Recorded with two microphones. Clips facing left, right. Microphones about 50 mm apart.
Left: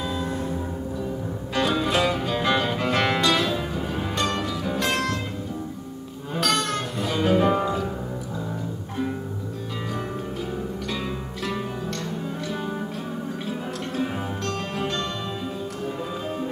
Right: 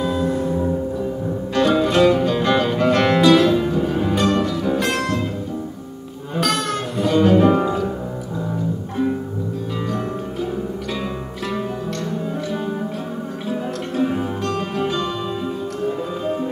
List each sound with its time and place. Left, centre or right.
0.4 s music: centre
1.5 s music: centre
6.3 s music: centre
13.5 s music: centre